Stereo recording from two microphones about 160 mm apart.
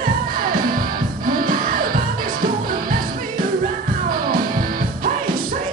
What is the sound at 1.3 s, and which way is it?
Music, 60° right (ahead or behind).